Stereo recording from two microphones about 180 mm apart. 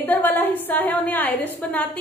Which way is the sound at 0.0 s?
10° left (ahead or behind).